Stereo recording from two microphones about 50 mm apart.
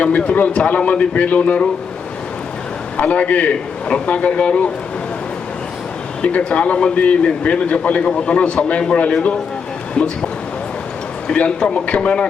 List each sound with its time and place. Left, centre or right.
0.0 s a man's voice: left
3.0 s a man's voice: left
6.2 s a man's voice: left
9.9 s a man's voice: centre
11.3 s a man's voice: left